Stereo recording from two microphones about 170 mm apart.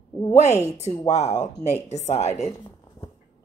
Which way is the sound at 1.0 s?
40° left (ahead or behind).